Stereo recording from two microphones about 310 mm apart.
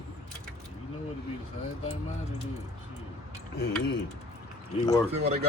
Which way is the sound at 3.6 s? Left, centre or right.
Left.